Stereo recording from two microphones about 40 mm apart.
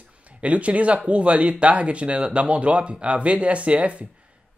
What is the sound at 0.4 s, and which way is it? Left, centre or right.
Speech, right.